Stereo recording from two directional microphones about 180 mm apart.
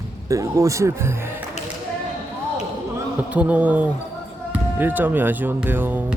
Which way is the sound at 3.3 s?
5° right (ahead or behind).